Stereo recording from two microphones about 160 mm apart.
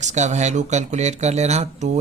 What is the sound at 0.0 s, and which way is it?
Speech, 45° right (ahead or behind).